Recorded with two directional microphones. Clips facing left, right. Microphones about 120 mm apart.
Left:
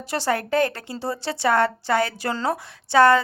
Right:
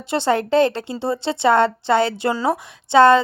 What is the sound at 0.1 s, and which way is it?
A woman's voice, 25° right (ahead or behind).